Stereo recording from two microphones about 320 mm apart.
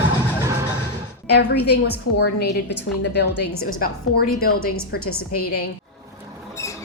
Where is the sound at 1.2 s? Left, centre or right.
Left.